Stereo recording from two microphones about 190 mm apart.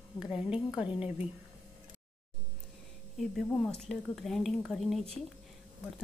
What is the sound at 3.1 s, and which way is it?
Speech, centre (ahead or behind).